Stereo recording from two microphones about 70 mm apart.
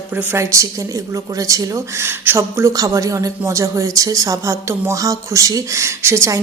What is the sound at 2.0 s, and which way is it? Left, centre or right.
Speech, right.